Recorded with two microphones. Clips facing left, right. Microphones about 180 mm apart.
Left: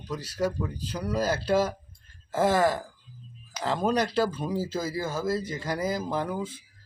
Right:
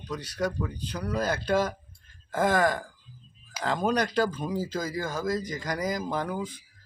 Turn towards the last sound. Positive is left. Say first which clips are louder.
# left 1 dB
turn(degrees=0)  # may be behind; listen again after turning